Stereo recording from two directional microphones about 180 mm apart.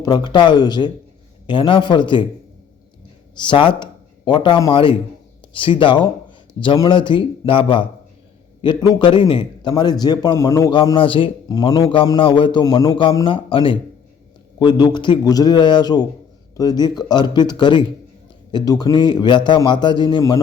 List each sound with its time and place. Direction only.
0.0 s a man's voice: 20° left (ahead or behind)
3.3 s a man's voice: 25° left (ahead or behind)